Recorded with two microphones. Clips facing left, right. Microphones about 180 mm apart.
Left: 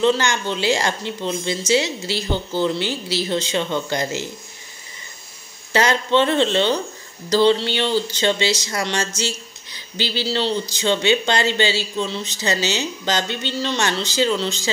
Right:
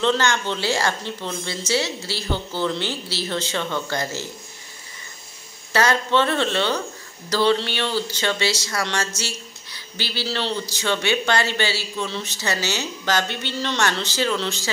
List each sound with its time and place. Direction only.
0.0 s a woman's voice: 10° left (ahead or behind)
5.7 s speech: 20° left (ahead or behind)